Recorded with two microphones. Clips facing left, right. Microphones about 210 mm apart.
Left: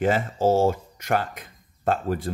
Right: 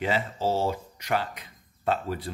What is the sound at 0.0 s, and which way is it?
Speech, 50° left (ahead or behind).